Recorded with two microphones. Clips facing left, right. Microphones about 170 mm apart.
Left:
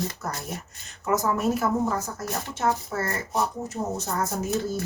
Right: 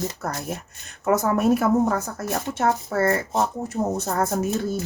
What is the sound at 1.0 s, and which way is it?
Speech, 60° right (ahead or behind).